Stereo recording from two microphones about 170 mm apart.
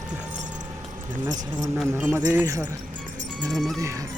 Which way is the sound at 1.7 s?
10° right (ahead or behind).